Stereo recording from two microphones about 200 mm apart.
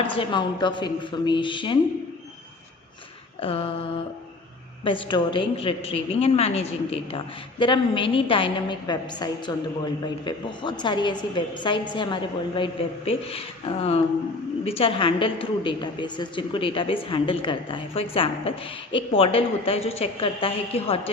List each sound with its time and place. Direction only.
0.1 s a woman's voice: 25° left (ahead or behind)
3.4 s a woman's voice: 25° left (ahead or behind)